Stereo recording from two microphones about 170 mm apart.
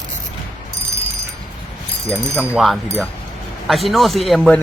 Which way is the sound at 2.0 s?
15° right (ahead or behind).